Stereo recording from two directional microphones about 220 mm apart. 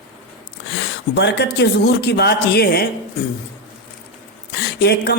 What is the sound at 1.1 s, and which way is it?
Speech, 50° left (ahead or behind).